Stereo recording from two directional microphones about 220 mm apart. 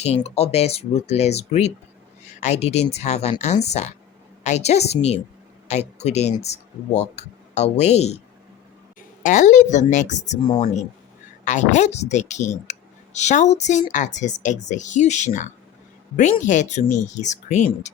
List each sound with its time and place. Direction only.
0.0 s speech: 30° left (ahead or behind)